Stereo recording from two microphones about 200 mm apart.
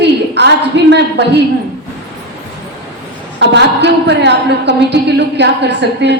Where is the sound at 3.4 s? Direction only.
60° right (ahead or behind).